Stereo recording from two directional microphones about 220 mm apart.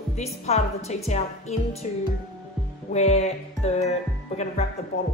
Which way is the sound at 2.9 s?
30° left (ahead or behind).